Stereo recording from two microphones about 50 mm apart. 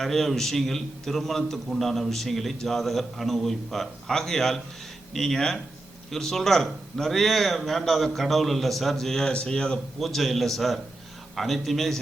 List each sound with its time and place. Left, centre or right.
0.0 s a man's voice: centre
9.3 s speech: centre
10.0 s a man's voice: centre